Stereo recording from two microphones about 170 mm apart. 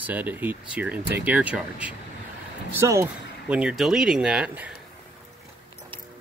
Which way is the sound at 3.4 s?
5° right (ahead or behind).